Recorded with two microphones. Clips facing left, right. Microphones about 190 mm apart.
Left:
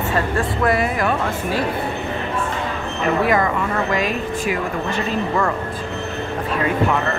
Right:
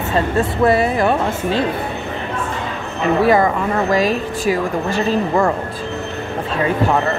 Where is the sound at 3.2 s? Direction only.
35° right (ahead or behind).